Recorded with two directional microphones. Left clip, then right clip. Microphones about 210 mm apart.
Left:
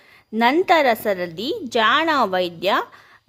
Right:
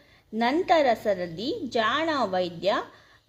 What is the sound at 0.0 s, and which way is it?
A woman's voice, 35° left (ahead or behind).